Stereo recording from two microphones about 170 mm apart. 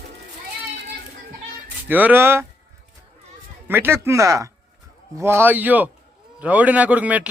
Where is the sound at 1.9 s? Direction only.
10° right (ahead or behind).